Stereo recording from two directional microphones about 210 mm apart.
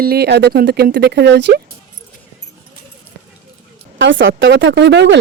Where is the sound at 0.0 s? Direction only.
50° right (ahead or behind).